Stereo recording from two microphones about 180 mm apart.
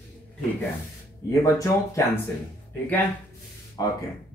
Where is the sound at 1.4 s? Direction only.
15° left (ahead or behind).